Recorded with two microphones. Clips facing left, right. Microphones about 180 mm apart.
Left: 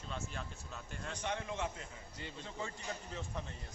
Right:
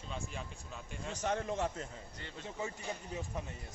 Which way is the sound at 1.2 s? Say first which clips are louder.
Right 5 dB; 40° right (ahead or behind).